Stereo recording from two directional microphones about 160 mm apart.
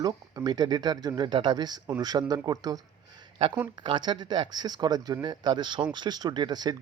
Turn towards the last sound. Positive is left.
turn(degrees=-25)  # may be behind; listen again after turning